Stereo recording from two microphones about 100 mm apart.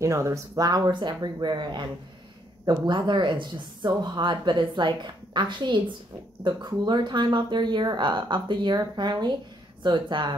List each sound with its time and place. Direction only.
0.0 s speech: 30° right (ahead or behind); by 10.3 s 50° right (ahead or behind)